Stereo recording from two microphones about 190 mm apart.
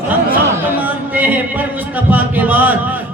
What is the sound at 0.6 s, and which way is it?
Speech, 10° right (ahead or behind).